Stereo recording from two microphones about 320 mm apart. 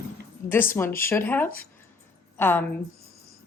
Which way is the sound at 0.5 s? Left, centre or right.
Centre.